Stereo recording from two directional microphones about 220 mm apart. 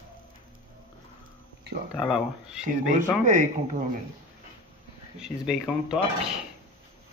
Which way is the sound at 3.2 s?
35° right (ahead or behind).